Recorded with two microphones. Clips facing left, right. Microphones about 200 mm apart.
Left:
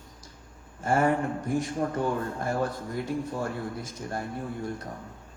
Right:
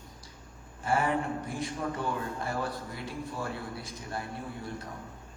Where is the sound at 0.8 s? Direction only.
45° left (ahead or behind).